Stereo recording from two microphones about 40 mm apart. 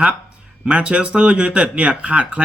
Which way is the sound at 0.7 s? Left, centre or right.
Right.